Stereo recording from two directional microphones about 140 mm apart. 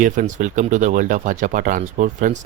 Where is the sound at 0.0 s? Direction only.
65° right (ahead or behind).